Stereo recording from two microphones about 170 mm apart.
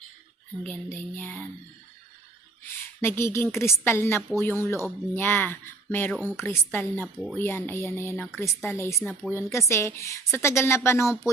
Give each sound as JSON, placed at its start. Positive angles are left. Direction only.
{"t": 0.6, "sound": "a woman's voice", "side_deg": 10}
{"t": 3.0, "sound": "a woman's voice", "side_deg": 15}